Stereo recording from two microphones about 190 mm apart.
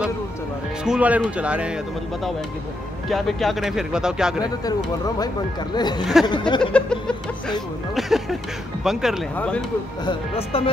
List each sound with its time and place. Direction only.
0.8 s speech: 5° right (ahead or behind)
3.1 s speech: centre (ahead or behind)
5.8 s a sound: 20° left (ahead or behind)
6.6 s speech: 5° left (ahead or behind)
10.0 s speech: 30° left (ahead or behind)